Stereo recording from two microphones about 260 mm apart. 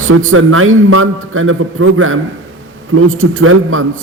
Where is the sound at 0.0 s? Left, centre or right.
Right.